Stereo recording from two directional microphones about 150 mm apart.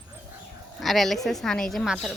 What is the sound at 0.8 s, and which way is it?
A woman's voice, centre (ahead or behind).